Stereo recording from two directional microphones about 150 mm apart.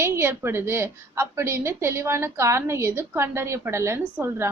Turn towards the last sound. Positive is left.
turn(degrees=-15)  # may be behind; listen again after turning